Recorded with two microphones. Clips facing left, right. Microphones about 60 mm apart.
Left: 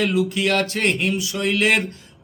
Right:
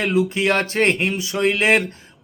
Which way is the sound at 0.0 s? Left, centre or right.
Right.